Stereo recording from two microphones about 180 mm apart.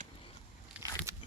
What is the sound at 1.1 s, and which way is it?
Biting, 15° right (ahead or behind).